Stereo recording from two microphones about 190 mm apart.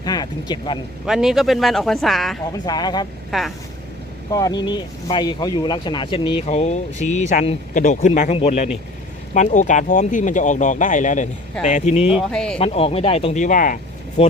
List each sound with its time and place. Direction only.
0.0 s speech: 20° left (ahead or behind)
1.0 s speech: centre (ahead or behind)
2.5 s speech: 20° left (ahead or behind)
3.3 s speech: centre (ahead or behind)
4.3 s speech: 20° left (ahead or behind); by 12.1 s 35° left (ahead or behind)
12.1 s speech: 5° left (ahead or behind)
12.5 s speech: 30° left (ahead or behind)